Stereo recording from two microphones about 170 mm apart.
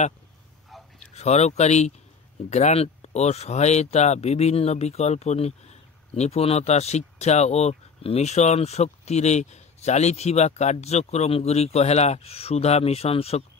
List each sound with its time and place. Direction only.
1.1 s speech: 40° left (ahead or behind)